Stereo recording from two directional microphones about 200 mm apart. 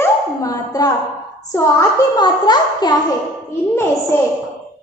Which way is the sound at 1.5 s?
20° left (ahead or behind).